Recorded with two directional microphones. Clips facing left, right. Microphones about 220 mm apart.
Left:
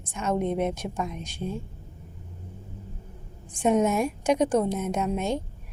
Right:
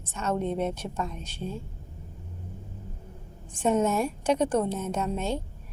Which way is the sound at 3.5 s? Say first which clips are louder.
Left 2 dB; 15° left (ahead or behind).